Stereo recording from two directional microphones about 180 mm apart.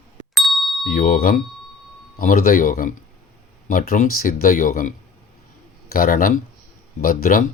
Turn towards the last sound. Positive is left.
turn(degrees=50)  # may be behind; listen again after turning